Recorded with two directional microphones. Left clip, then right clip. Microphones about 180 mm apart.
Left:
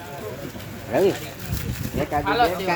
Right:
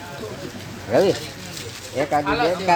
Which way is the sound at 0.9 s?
45° right (ahead or behind).